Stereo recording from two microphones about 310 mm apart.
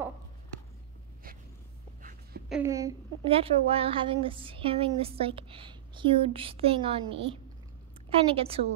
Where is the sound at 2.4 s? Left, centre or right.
Centre.